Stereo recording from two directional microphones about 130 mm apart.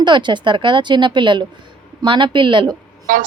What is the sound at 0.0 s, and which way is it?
Speech, 35° right (ahead or behind).